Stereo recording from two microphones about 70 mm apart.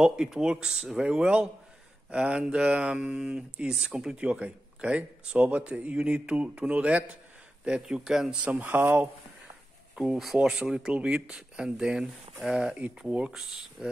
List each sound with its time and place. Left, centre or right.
0.0 s speech: centre
8.5 s speech: right
9.9 s speech: centre